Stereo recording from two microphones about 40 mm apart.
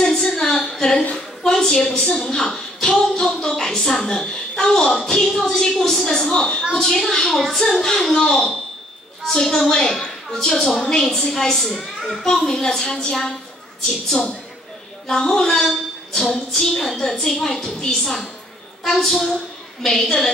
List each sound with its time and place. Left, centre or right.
0.0 s a sound: centre
1.1 s a woman's voice: centre
6.2 s a woman's voice: left
6.7 s a woman's voice: centre
7.3 s a woman's voice: centre
7.6 s a woman's voice: centre
12.3 s a woman's voice: centre